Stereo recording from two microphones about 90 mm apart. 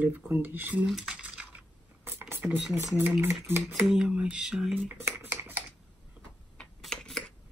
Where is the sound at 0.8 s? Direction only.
5° right (ahead or behind); by 2.5 s 25° right (ahead or behind).